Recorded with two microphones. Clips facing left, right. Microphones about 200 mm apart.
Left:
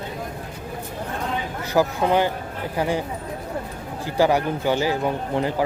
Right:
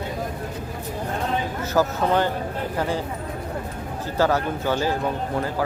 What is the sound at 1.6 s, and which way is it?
Speech, 15° left (ahead or behind).